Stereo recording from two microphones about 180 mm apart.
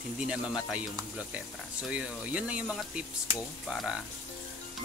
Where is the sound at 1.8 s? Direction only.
5° right (ahead or behind).